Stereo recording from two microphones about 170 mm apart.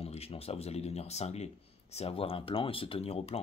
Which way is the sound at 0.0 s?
35° left (ahead or behind).